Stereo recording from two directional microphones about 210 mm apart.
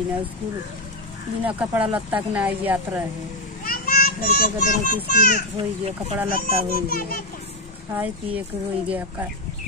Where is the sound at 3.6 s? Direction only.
45° left (ahead or behind).